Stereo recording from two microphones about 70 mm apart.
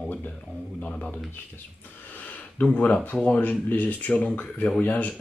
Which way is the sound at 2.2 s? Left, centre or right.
Left.